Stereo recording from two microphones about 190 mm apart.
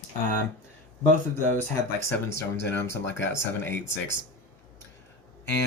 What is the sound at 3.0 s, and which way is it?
Speech, 70° left (ahead or behind).